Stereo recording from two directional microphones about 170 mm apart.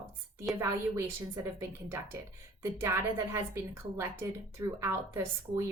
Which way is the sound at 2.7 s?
15° right (ahead or behind).